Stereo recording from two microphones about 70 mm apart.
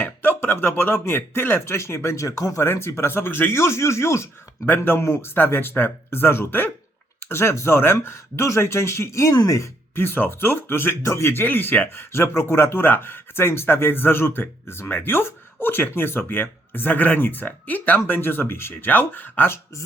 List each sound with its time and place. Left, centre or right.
0.0 s a sound: left
0.3 s speech: left
2.6 s speech: left
4.6 s speech: left